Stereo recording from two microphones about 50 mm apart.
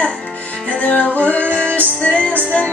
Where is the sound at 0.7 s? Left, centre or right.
Left.